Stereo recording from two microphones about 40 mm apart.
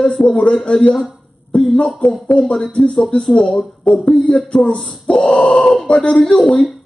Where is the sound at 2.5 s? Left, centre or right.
Left.